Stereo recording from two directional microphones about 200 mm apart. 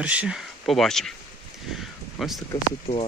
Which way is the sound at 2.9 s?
35° left (ahead or behind).